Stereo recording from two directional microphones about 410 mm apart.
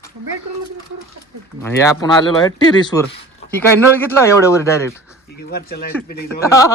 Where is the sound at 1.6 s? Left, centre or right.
Centre.